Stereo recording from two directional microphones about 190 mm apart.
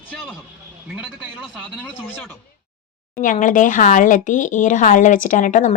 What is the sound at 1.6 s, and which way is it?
Speech, 5° left (ahead or behind).